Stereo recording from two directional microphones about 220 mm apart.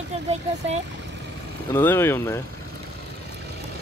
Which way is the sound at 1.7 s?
10° left (ahead or behind).